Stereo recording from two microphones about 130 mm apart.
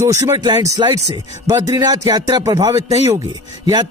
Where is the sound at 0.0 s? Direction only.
25° right (ahead or behind).